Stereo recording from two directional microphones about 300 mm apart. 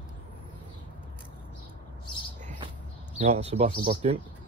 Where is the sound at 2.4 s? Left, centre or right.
Centre.